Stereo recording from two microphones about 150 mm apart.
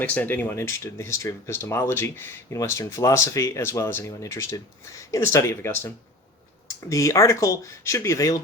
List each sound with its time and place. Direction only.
0.0 s speech: 10° left (ahead or behind)